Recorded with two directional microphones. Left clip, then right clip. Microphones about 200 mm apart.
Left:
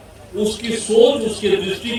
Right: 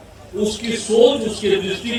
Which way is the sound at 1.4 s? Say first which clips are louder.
Even; 35° left (ahead or behind).